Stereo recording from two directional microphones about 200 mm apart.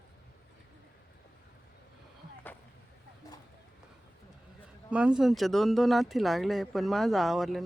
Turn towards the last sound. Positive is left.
turn(degrees=0)  # may be behind; listen again after turning